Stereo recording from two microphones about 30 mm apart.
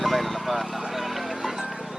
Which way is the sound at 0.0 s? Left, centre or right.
Centre.